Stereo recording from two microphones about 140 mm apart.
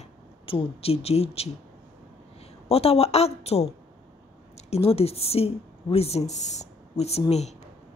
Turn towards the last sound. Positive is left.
turn(degrees=50)  # may be behind; listen again after turning